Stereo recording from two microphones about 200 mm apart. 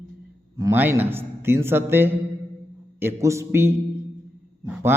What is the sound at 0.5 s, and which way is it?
Speech, 15° right (ahead or behind).